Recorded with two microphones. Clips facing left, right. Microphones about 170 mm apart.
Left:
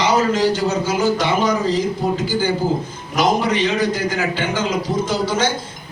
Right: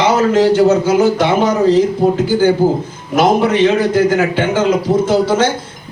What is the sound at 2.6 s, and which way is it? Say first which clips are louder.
A man's voice: right 6 dB; 50° right (ahead or behind).